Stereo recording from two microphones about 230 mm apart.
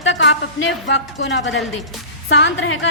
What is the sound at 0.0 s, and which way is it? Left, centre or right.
Speech, left.